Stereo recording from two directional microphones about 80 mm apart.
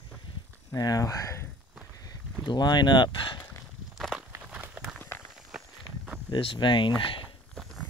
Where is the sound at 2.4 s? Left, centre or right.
Left.